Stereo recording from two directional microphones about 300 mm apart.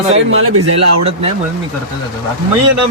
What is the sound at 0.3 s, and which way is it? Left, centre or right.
Speech, right.